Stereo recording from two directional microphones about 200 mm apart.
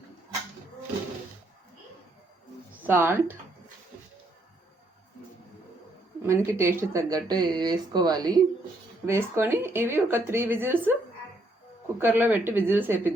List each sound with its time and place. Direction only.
2.8 s a woman's voice: 10° right (ahead or behind)
6.2 s a woman's voice: 15° right (ahead or behind)
11.9 s a woman's voice: 10° right (ahead or behind)